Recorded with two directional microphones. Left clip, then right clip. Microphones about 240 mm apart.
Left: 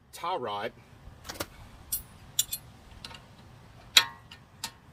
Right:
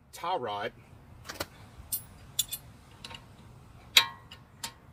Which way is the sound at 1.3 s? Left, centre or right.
Left.